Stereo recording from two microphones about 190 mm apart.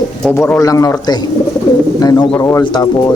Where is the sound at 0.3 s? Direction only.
5° left (ahead or behind).